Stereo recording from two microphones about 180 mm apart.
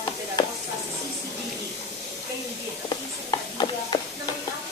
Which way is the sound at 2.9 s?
25° left (ahead or behind).